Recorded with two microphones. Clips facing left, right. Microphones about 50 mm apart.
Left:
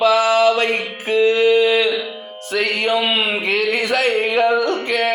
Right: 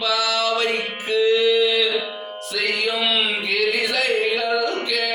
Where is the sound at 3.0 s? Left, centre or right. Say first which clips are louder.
Left 3 dB; left.